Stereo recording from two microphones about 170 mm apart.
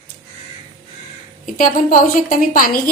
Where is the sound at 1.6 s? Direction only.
55° left (ahead or behind).